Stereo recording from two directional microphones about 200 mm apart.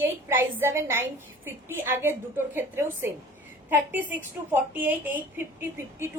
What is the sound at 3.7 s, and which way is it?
A woman's voice, 10° right (ahead or behind).